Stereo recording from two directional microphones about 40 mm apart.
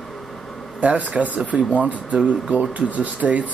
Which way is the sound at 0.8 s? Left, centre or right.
Right.